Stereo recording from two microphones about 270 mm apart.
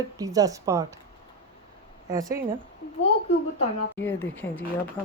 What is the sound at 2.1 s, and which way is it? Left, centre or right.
Speech, centre.